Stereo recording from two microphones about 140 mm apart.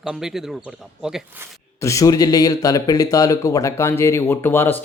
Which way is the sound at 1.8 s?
20° left (ahead or behind).